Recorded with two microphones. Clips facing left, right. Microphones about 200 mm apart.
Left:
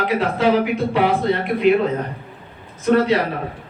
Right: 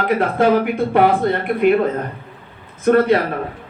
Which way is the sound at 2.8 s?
55° right (ahead or behind).